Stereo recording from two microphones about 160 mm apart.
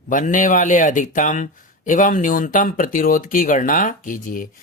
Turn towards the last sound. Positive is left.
turn(degrees=60)  # may be behind; listen again after turning